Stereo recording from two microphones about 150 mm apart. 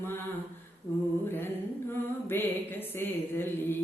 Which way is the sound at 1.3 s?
15° left (ahead or behind).